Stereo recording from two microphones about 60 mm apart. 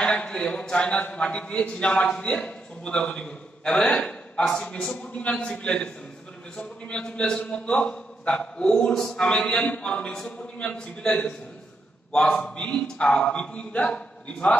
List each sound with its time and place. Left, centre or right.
0.0 s a man's voice: centre